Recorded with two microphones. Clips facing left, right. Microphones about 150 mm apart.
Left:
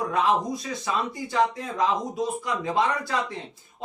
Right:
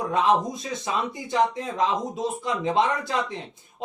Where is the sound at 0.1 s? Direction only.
20° right (ahead or behind).